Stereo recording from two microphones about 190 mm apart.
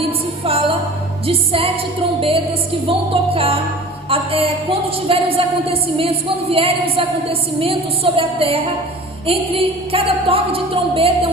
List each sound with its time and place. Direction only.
0.4 s music: 30° right (ahead or behind)
1.3 s a woman's voice: 30° right (ahead or behind)
2.8 s music: 30° right (ahead or behind)
4.1 s a woman's voice: 30° right (ahead or behind)